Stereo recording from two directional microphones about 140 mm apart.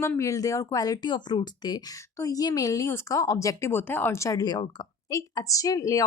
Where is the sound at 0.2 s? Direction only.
25° left (ahead or behind).